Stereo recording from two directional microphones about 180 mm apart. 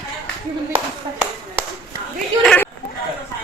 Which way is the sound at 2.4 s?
10° left (ahead or behind).